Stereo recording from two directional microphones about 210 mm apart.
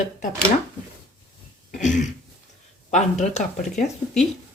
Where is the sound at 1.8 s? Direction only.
35° left (ahead or behind).